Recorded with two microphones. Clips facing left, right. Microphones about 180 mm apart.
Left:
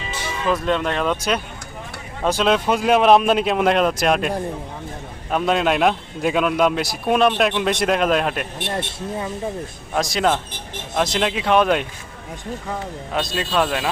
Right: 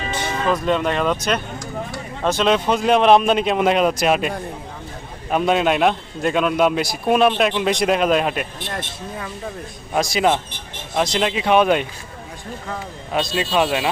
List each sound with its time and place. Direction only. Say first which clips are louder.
0.4 s a man's voice: right 1 dB; centre (ahead or behind)
8.7 s speech: left 7 dB; 25° left (ahead or behind)
9.9 s a man's voice: right 2 dB; 5° right (ahead or behind)
13.3 s a man's voice: right 2 dB; 5° right (ahead or behind)